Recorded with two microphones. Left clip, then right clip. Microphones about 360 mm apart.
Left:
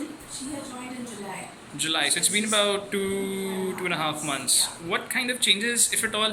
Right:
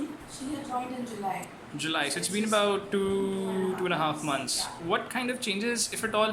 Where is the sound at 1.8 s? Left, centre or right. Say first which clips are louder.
Left 5 dB; centre.